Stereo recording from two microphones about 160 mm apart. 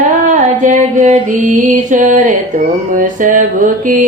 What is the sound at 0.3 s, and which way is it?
Music, 50° right (ahead or behind).